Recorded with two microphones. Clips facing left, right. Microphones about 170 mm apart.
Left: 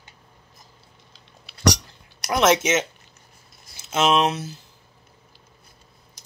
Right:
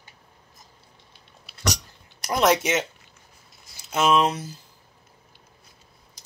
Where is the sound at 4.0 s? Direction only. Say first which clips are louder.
Left 1 dB; 70° left (ahead or behind).